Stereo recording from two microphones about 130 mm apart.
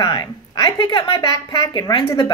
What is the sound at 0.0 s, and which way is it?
A woman's voice, 30° left (ahead or behind).